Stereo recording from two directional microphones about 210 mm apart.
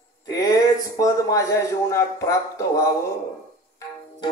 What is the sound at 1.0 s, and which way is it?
A man's voice, 15° left (ahead or behind).